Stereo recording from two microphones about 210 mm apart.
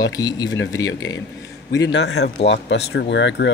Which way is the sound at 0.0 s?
20° left (ahead or behind).